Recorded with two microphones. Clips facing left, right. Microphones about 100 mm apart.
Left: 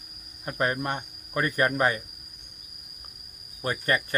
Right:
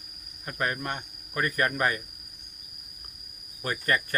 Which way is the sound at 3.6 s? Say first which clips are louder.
Left 1 dB; 20° left (ahead or behind).